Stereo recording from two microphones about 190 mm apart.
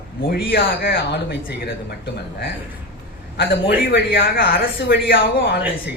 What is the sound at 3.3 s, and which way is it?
A man's voice, 55° left (ahead or behind).